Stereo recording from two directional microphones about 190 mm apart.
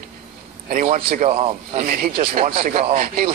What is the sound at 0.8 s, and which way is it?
Speech, 30° right (ahead or behind).